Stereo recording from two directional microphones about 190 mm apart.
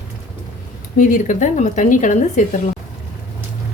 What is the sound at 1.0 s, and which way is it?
Speech, 45° left (ahead or behind).